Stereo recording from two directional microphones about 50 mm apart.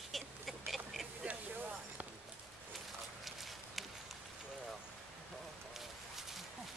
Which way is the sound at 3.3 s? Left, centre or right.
Centre.